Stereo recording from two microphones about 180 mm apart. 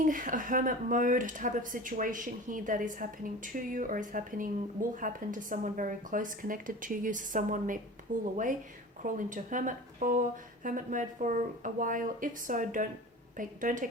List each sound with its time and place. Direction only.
0.0 s speech: 50° right (ahead or behind)